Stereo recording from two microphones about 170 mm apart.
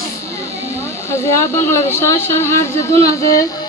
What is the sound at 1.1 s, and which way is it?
A woman's voice, 15° left (ahead or behind).